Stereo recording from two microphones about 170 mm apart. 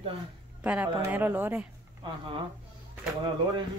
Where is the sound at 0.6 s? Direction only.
10° right (ahead or behind).